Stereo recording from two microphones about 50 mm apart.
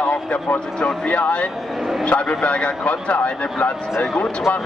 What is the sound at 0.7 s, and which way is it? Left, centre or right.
A man's voice, left.